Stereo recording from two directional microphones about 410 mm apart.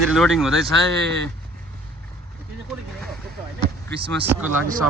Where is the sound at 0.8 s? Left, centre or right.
Right.